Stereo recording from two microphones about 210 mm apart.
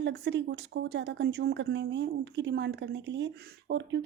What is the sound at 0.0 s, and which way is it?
Speech, 55° right (ahead or behind).